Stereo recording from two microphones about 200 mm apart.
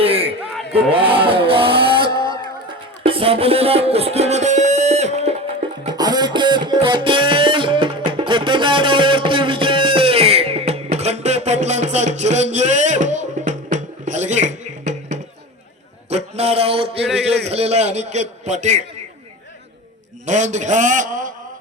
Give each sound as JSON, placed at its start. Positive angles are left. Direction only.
{"t": 0.0, "sound": "a sound", "side_deg": -30}
{"t": 2.1, "sound": "music", "side_deg": -25}
{"t": 5.9, "sound": "music", "side_deg": -20}
{"t": 10.9, "sound": "a sound", "side_deg": -35}
{"t": 17.4, "sound": "a man's voice", "side_deg": -30}
{"t": 20.2, "sound": "a man's voice", "side_deg": -35}